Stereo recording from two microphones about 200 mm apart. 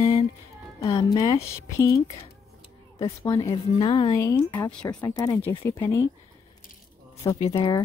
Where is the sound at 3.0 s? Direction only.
15° left (ahead or behind).